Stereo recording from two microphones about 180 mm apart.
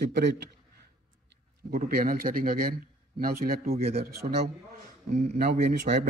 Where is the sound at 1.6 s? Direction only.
50° right (ahead or behind).